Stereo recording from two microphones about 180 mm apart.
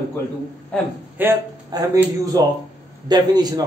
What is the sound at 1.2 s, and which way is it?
A man's voice, 15° right (ahead or behind).